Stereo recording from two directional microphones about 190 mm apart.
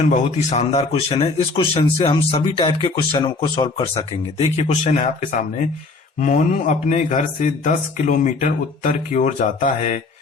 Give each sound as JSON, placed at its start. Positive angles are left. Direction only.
{"t": 0.0, "sound": "speech", "side_deg": 35}